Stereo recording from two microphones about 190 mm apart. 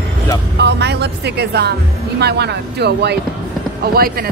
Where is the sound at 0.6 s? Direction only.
60° right (ahead or behind).